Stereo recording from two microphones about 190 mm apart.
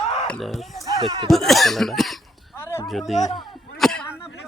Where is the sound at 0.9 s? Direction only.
20° right (ahead or behind).